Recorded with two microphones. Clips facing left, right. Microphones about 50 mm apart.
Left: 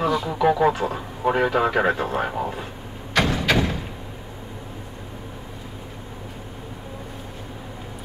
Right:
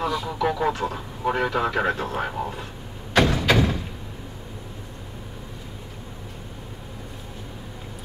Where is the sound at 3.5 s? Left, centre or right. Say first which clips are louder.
Right 1 dB; centre.